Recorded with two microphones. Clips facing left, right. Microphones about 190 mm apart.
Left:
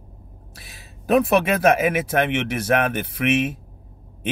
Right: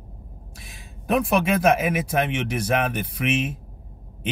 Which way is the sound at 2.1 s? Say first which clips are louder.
Left 2 dB; 60° left (ahead or behind).